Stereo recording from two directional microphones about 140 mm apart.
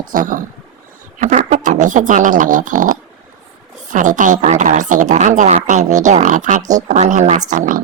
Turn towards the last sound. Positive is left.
turn(degrees=-70)  # may be behind; listen again after turning